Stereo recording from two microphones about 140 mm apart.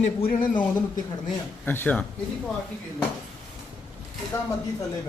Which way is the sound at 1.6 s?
15° left (ahead or behind).